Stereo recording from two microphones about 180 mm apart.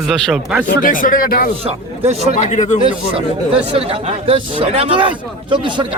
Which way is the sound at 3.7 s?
30° right (ahead or behind).